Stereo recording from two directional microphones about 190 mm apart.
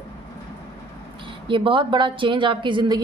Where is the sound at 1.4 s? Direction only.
25° right (ahead or behind).